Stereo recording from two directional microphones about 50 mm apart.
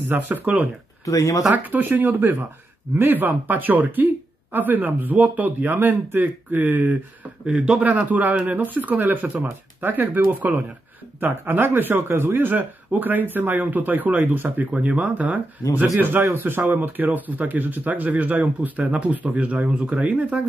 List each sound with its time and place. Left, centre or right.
0.0 s speech: right
1.0 s speech: left
1.5 s speech: right
7.4 s a man's voice: centre
7.8 s speech: right
14.7 s speech: right